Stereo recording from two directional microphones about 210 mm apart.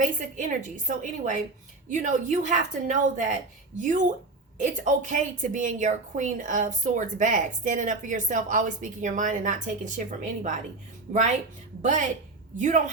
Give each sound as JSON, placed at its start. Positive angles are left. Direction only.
{"t": 0.0, "sound": "a woman's voice", "side_deg": -40}
{"t": 11.1, "sound": "a woman's voice", "side_deg": -35}